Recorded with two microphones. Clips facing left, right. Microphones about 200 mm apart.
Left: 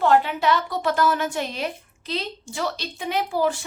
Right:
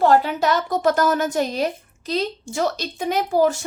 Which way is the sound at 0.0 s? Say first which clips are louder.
Right 2 dB; 40° right (ahead or behind).